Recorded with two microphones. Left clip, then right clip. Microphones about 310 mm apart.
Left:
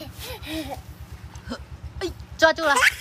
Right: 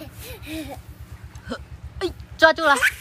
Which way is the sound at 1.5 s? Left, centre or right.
Centre.